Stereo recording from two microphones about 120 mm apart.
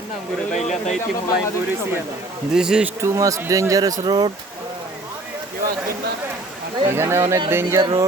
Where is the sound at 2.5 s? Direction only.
5° right (ahead or behind).